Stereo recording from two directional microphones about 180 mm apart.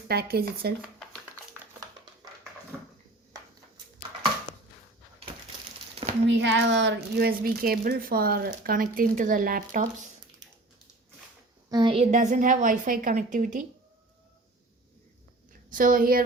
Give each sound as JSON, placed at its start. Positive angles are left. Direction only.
{"t": 0.1, "sound": "speech", "side_deg": -60}
{"t": 2.7, "sound": "a sound", "side_deg": -10}
{"t": 6.2, "sound": "a woman's voice", "side_deg": -85}
{"t": 11.7, "sound": "a sound", "side_deg": -25}
{"t": 12.1, "sound": "a woman's voice", "side_deg": -45}
{"t": 15.7, "sound": "a woman's voice", "side_deg": -50}